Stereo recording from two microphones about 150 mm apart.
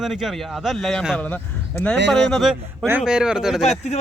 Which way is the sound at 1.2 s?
10° left (ahead or behind).